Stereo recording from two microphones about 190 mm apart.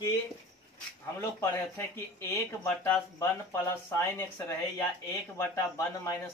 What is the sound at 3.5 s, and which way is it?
Speech, 10° left (ahead or behind).